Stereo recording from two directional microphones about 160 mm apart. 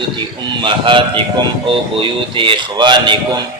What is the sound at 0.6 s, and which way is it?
A man's voice, 30° right (ahead or behind).